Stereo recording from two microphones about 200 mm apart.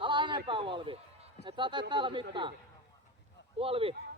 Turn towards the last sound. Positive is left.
turn(degrees=-30)  # may be behind; listen again after turning